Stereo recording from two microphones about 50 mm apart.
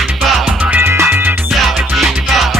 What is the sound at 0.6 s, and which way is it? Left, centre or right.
Music, right.